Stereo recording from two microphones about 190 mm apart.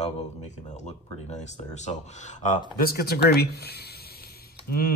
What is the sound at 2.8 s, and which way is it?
Speech, 55° left (ahead or behind).